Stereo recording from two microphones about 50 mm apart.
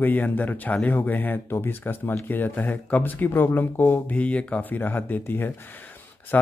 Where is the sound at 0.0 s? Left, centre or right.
Left.